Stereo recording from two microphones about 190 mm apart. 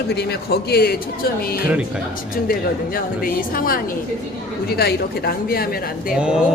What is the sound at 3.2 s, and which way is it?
A woman's voice, 50° left (ahead or behind).